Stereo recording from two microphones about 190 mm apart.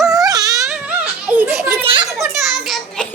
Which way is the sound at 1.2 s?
5° right (ahead or behind).